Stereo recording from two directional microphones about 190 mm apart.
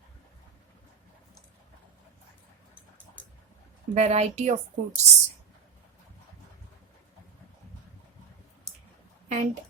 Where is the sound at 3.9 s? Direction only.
35° right (ahead or behind).